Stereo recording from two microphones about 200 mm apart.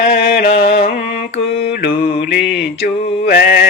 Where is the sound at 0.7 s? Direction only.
35° left (ahead or behind).